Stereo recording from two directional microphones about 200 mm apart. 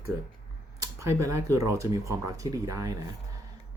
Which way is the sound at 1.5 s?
15° right (ahead or behind).